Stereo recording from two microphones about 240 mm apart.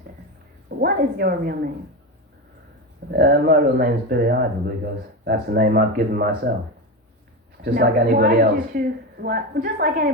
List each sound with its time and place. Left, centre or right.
0.8 s a woman's voice: right
3.1 s a woman's voice: right
7.6 s a woman's voice: right